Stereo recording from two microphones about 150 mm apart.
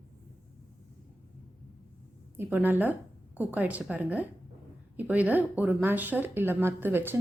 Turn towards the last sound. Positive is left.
turn(degrees=-15)  # may be behind; listen again after turning